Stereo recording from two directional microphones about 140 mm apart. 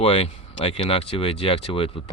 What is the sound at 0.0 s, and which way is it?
Speech, 40° left (ahead or behind).